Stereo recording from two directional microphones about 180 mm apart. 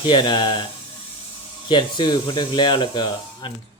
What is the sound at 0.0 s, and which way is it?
Speech, 25° left (ahead or behind).